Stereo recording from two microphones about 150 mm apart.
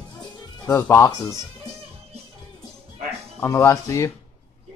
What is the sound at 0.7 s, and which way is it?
Speech, 20° left (ahead or behind).